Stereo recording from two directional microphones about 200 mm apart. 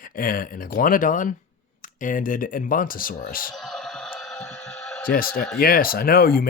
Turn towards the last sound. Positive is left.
turn(degrees=50)  # may be behind; listen again after turning